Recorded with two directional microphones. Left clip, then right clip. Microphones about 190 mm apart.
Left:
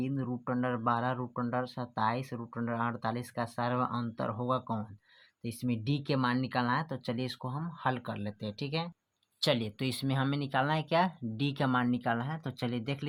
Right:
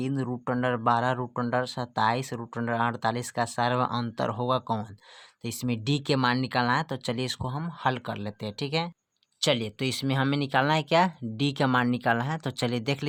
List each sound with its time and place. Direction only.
0.0 s speech: 40° right (ahead or behind)
9.4 s speech: 25° right (ahead or behind); by 13.1 s 45° right (ahead or behind)